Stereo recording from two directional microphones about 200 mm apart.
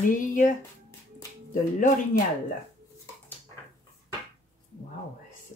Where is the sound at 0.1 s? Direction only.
40° left (ahead or behind).